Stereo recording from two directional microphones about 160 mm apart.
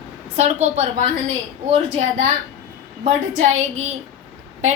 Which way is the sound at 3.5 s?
45° right (ahead or behind).